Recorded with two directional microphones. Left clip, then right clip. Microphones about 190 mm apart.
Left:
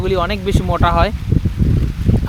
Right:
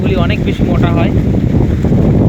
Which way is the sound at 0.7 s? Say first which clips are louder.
Left 2 dB; 15° left (ahead or behind).